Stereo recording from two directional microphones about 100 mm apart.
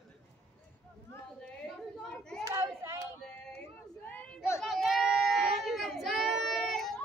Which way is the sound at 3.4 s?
15° left (ahead or behind).